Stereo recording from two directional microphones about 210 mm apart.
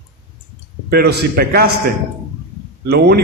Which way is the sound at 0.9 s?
50° right (ahead or behind).